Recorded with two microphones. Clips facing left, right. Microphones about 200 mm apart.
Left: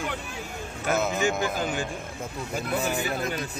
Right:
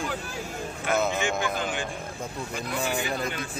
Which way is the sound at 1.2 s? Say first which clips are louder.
Left 2 dB; 40° left (ahead or behind).